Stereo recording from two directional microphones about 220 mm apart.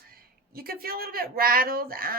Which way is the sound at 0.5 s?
40° right (ahead or behind).